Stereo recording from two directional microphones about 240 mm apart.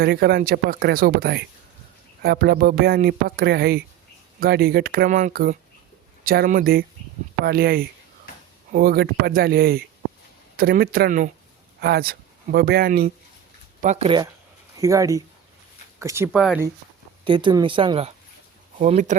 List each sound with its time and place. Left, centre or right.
0.0 s speech: right
13.8 s speech: right; by 16.6 s centre
17.2 s speech: centre